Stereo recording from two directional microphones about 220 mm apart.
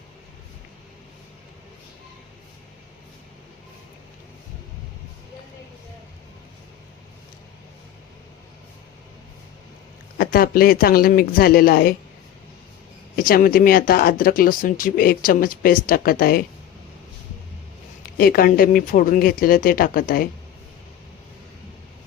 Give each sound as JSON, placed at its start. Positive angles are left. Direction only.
{"t": 10.2, "sound": "speech", "side_deg": 40}
{"t": 13.1, "sound": "speech", "side_deg": 40}
{"t": 18.0, "sound": "speech", "side_deg": 40}